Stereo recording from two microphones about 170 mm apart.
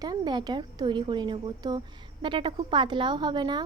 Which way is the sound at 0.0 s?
25° right (ahead or behind).